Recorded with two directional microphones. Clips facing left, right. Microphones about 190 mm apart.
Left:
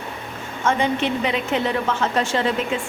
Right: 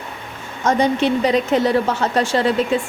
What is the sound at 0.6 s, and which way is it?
A woman's voice, 40° right (ahead or behind).